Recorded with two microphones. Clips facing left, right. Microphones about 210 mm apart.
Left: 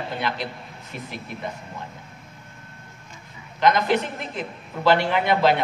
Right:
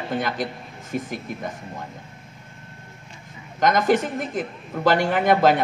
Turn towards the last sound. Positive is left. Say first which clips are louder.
# right 2 dB
turn(degrees=-45)  # may be behind; listen again after turning